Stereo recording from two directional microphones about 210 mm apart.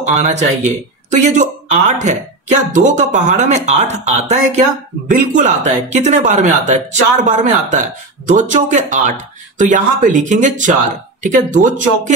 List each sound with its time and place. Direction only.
0.0 s speech: 35° right (ahead or behind)